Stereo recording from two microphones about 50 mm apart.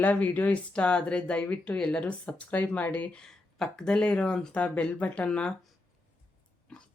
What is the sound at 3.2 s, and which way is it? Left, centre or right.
Speech, centre.